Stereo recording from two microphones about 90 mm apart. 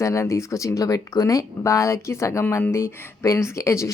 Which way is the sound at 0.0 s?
35° left (ahead or behind).